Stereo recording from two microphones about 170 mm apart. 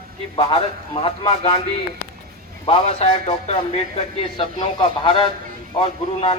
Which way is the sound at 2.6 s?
35° left (ahead or behind).